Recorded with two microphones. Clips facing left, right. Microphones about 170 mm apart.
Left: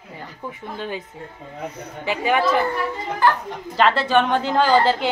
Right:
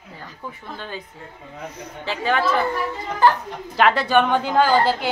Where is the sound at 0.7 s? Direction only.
15° left (ahead or behind).